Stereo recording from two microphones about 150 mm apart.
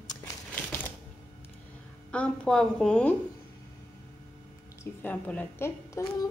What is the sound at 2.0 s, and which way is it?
A woman's voice, 5° left (ahead or behind).